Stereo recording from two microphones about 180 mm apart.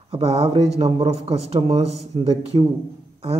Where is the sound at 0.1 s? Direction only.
35° right (ahead or behind).